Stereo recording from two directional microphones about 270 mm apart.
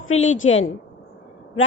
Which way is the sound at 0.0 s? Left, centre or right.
Left.